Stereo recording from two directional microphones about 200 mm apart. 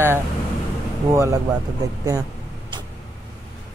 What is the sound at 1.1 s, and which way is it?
Speech, 15° right (ahead or behind).